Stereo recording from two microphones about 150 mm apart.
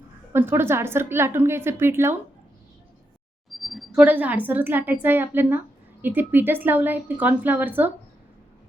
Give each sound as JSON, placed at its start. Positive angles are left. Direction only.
{"t": 0.3, "sound": "a woman's voice", "side_deg": -15}
{"t": 3.6, "sound": "a sound", "side_deg": 0}
{"t": 4.0, "sound": "a woman's voice", "side_deg": -10}